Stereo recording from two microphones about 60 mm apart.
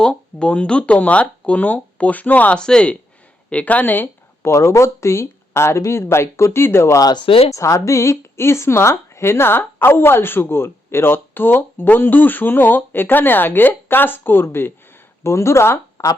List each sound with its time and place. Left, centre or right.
0.0 s speech: centre
3.5 s speech: left
4.5 s speech: left
7.5 s a woman's voice: left